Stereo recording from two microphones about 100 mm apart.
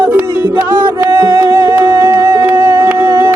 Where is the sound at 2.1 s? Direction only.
35° right (ahead or behind).